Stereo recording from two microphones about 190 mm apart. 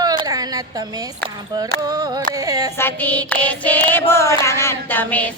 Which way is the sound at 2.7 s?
10° left (ahead or behind).